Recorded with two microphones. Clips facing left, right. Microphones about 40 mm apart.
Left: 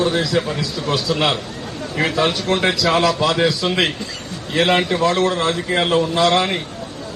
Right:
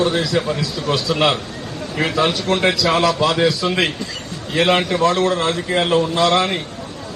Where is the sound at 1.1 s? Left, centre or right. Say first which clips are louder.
Right 3 dB; centre.